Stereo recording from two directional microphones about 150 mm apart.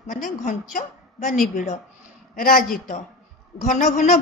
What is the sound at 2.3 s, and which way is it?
Speech, 70° left (ahead or behind).